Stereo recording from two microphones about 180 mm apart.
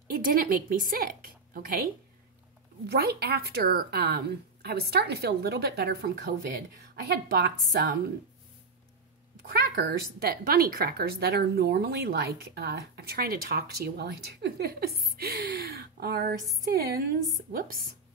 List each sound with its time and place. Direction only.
0.1 s a woman's voice: 55° right (ahead or behind)
2.9 s a woman's voice: 60° right (ahead or behind)
9.5 s a woman's voice: 70° right (ahead or behind); by 17.8 s 55° right (ahead or behind)